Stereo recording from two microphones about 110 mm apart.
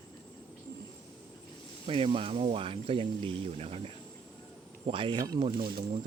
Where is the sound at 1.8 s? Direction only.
55° right (ahead or behind).